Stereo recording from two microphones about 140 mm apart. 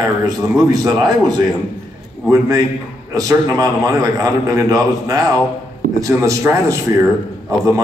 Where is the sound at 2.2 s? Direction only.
25° right (ahead or behind).